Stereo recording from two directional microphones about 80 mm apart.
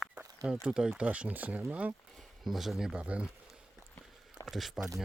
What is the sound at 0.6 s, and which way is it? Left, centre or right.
Speech, centre.